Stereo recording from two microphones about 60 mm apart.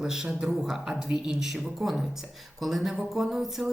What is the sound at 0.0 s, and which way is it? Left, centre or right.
A man's voice, centre.